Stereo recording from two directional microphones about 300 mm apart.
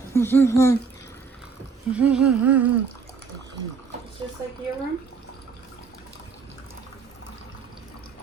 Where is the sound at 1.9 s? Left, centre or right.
Centre.